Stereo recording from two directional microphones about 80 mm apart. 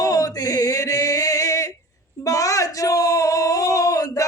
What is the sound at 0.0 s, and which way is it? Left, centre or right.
Male singing, left.